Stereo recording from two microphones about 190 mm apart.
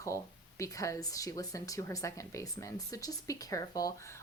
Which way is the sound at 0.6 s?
15° left (ahead or behind).